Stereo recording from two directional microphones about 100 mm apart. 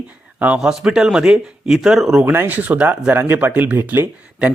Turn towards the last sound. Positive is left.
turn(degrees=-20)  # may be behind; listen again after turning